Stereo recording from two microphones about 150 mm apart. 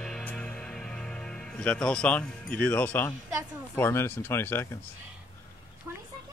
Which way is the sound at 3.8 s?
15° left (ahead or behind).